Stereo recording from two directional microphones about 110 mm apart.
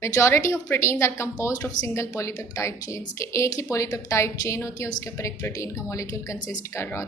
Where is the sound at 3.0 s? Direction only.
40° left (ahead or behind).